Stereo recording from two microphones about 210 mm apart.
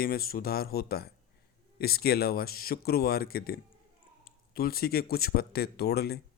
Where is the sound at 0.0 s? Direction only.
45° left (ahead or behind).